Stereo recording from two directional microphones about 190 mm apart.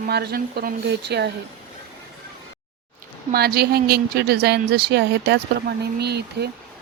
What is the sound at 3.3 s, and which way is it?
Speech, 55° right (ahead or behind).